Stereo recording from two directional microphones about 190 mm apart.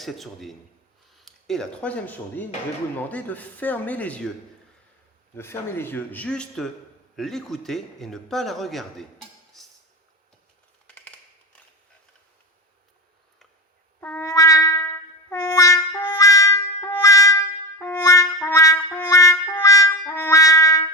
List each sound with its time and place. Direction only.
0.0 s a man's voice: centre (ahead or behind)
5.4 s a man's voice: 10° left (ahead or behind)
9.5 s a sound: centre (ahead or behind)
14.0 s trumpet: 10° left (ahead or behind)